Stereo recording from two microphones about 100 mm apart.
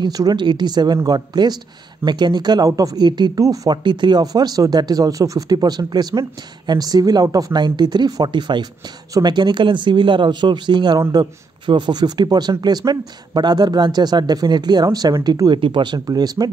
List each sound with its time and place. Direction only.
0.0 s speech: 40° right (ahead or behind)
3.3 s speech: 40° right (ahead or behind)